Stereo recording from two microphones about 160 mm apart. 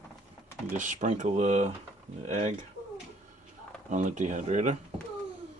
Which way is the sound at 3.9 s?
50° right (ahead or behind).